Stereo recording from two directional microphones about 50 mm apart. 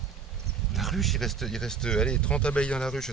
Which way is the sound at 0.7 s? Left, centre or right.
Centre.